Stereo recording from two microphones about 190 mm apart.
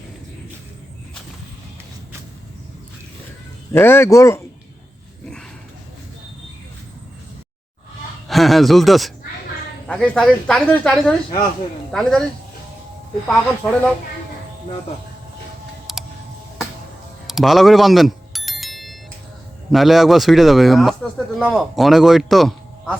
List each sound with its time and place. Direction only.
3.7 s speech: 10° left (ahead or behind)
8.3 s speech: centre (ahead or behind)
13.2 s speech: 5° left (ahead or behind)
15.9 s a sound: centre (ahead or behind)
17.2 s bicycle bell: centre (ahead or behind)
19.7 s speech: centre (ahead or behind)